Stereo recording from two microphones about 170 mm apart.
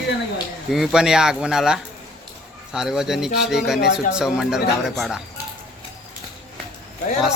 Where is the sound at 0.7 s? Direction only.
Centre (ahead or behind).